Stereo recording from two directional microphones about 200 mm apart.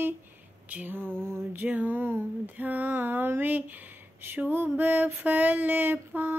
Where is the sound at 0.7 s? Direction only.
10° right (ahead or behind).